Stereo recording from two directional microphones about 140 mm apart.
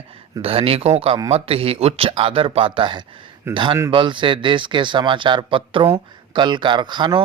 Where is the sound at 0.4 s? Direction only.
45° right (ahead or behind).